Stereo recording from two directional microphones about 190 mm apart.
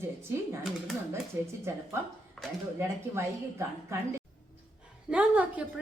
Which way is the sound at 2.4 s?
Centre (ahead or behind).